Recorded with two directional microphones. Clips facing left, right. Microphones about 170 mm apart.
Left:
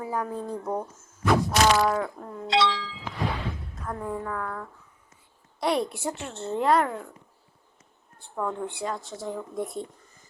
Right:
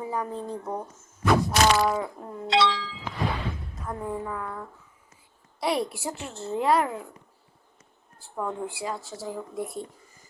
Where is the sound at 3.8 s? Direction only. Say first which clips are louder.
Even; 10° right (ahead or behind).